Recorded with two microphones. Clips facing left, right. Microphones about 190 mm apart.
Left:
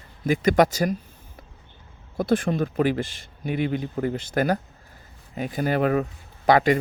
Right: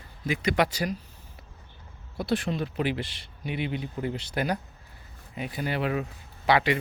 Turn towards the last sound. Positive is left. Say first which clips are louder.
# left 5 dB
turn(degrees=45)  # may be behind; listen again after turning